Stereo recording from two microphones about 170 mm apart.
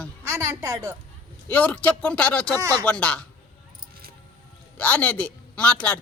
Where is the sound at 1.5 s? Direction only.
10° left (ahead or behind).